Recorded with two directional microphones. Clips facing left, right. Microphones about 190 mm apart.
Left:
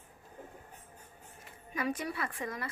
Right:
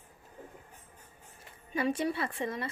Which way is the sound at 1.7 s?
30° right (ahead or behind).